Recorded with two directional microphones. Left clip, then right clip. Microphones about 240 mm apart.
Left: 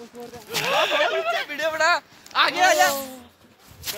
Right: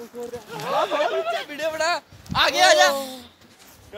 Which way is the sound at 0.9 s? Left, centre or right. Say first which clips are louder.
Left 1 dB; right.